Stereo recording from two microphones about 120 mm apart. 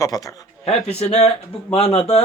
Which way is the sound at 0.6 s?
60° left (ahead or behind).